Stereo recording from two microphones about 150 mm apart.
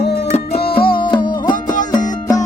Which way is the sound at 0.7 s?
75° left (ahead or behind).